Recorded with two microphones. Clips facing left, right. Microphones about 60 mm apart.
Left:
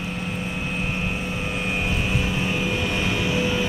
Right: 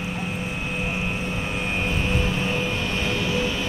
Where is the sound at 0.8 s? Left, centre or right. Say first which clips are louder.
Right 1 dB; centre.